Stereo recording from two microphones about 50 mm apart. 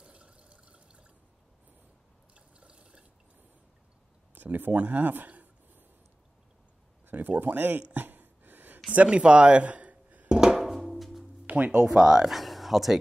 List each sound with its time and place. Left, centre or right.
0.0 s water: right
2.3 s drip: right
4.4 s speech: right
7.1 s speech: right
7.9 s a sound: right
10.2 s music: centre
11.4 s speech: right
12.3 s speech: centre